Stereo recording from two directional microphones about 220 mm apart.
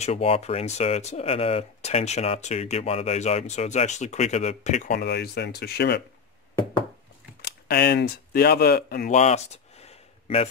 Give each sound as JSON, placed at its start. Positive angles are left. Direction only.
{"t": 0.0, "sound": "speech", "side_deg": 25}
{"t": 7.4, "sound": "speech", "side_deg": 45}